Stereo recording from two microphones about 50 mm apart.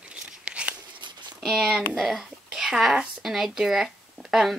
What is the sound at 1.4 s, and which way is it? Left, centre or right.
Speech, centre.